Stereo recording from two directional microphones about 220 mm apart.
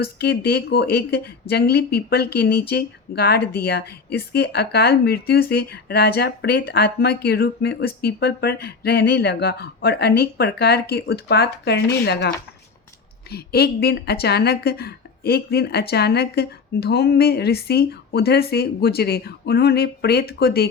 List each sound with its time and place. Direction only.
0.0 s speech: 45° left (ahead or behind)
13.3 s speech: 45° left (ahead or behind)